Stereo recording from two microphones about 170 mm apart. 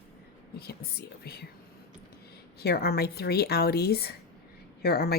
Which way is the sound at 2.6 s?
70° left (ahead or behind).